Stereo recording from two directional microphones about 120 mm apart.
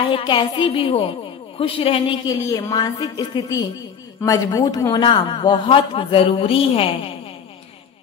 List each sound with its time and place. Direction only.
0.1 s a man's voice: 45° left (ahead or behind)
2.2 s a woman's voice: 30° left (ahead or behind)
5.0 s a man's voice: 40° left (ahead or behind)